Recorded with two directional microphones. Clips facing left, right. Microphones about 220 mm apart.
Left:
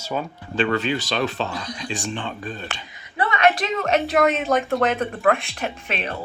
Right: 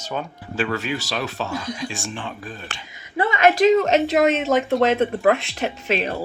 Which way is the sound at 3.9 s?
20° right (ahead or behind).